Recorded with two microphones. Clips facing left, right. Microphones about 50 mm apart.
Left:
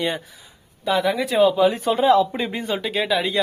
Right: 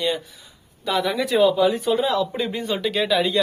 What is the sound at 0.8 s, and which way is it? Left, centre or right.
Speech, centre.